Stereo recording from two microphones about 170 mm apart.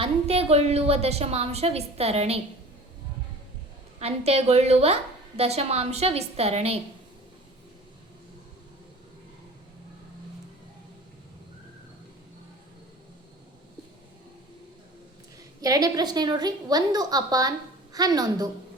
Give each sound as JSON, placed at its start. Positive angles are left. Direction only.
{"t": 0.0, "sound": "a woman's voice", "side_deg": -35}
{"t": 4.0, "sound": "a woman's voice", "side_deg": -40}
{"t": 15.6, "sound": "a woman's voice", "side_deg": -20}